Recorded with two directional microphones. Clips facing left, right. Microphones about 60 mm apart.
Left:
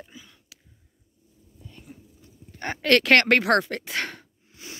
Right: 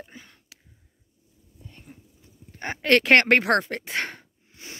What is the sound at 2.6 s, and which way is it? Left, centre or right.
Speech, centre.